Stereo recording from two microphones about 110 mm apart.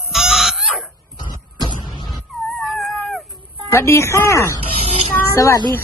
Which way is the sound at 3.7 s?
25° left (ahead or behind).